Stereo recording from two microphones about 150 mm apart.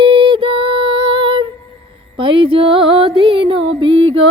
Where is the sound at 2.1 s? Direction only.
35° right (ahead or behind).